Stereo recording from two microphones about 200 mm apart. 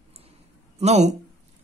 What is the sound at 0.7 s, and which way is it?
Speech, 35° right (ahead or behind).